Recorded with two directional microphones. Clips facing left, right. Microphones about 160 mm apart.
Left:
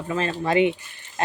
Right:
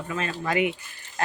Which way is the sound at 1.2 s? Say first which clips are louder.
Left 2 dB; 20° left (ahead or behind).